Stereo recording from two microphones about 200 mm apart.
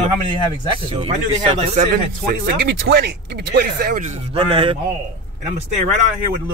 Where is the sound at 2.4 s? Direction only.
55° right (ahead or behind).